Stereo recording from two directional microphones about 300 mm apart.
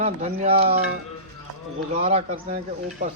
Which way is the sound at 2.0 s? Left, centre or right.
Centre.